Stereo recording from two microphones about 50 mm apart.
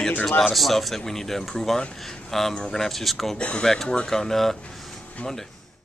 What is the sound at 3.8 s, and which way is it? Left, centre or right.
Speech, centre.